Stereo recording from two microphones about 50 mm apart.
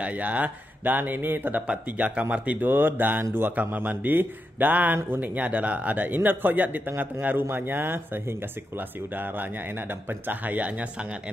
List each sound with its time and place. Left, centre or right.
0.0 s a man's voice: right
1.7 s speech: right
2.6 s a man's voice: right